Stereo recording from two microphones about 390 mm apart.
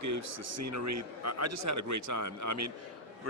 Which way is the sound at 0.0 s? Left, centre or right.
Right.